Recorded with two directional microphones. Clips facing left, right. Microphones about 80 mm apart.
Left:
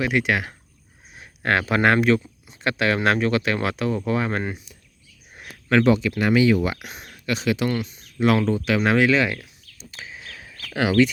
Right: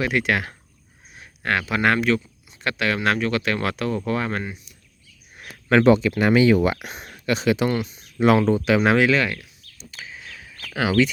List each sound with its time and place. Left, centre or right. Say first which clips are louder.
0.0 s speech: even; centre
1.1 s speech: left 2 dB; left
5.8 s speech: right 5 dB; right
8.8 s speech: left 2 dB; centre
9.1 s speech: left 1 dB; centre
10.2 s a sound: even; centre
10.8 s speech: left 1 dB; centre